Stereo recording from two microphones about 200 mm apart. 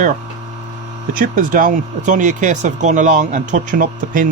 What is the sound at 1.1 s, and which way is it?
Speech, 45° right (ahead or behind).